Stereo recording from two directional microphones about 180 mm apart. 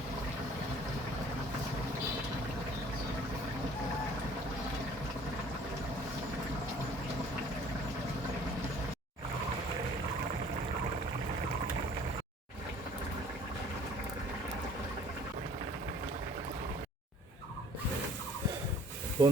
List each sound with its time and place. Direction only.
19.2 s speech: 15° right (ahead or behind)